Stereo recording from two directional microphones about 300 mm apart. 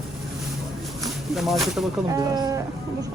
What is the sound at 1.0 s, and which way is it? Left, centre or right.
Speech, centre.